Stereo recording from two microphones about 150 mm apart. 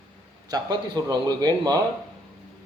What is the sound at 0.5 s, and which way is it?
Speech, 25° right (ahead or behind).